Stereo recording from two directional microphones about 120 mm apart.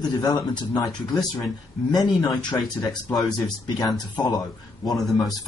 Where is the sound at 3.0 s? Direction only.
Centre (ahead or behind).